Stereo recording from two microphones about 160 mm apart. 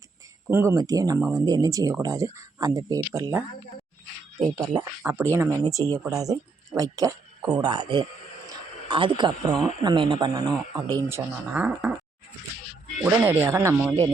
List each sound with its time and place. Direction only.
0.4 s speech: 15° right (ahead or behind)
4.5 s speech: 25° right (ahead or behind)
4.8 s speech: 15° right (ahead or behind)
11.5 s speech: 5° right (ahead or behind)
13.0 s speech: 15° right (ahead or behind)